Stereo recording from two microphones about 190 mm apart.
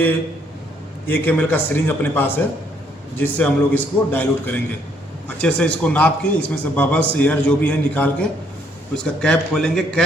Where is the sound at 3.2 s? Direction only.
10° left (ahead or behind).